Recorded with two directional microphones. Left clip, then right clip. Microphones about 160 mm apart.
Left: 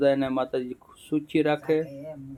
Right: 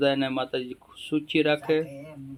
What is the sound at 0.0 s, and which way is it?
Speech, 10° left (ahead or behind).